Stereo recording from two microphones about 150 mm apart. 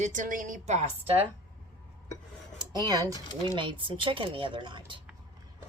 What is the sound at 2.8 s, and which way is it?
Speech, 25° right (ahead or behind).